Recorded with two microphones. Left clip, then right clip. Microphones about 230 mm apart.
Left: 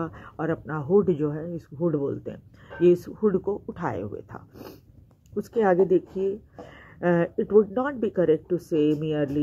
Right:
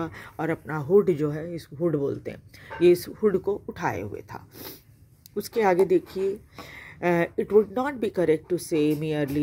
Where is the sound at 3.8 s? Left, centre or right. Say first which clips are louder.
Right 2 dB; right.